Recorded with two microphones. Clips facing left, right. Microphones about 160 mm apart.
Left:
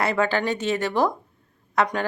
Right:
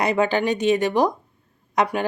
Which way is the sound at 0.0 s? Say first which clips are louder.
Right 2 dB; 15° right (ahead or behind).